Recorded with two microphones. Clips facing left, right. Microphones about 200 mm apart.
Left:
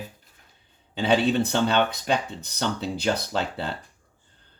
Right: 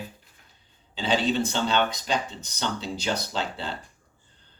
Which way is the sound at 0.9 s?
60° left (ahead or behind).